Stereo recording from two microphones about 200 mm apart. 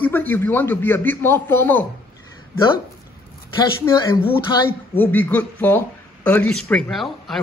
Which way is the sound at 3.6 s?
20° left (ahead or behind).